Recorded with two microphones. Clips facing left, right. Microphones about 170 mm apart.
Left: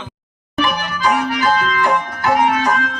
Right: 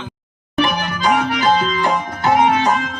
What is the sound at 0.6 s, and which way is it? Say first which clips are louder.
Music: right 1 dB; 25° right (ahead or behind).